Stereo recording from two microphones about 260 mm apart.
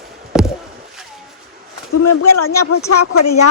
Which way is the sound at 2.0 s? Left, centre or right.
Left.